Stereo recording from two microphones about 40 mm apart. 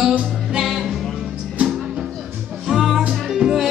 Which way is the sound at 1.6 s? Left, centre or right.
Right.